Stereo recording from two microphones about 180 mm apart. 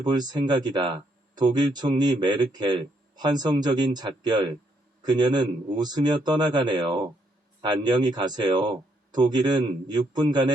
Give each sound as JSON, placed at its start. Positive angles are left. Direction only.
{"t": 0.0, "sound": "speech", "side_deg": -25}